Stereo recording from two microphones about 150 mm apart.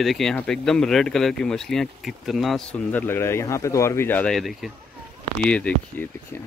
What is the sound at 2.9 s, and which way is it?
Speech, 15° left (ahead or behind).